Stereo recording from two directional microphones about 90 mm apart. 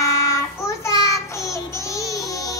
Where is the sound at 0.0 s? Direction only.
35° left (ahead or behind).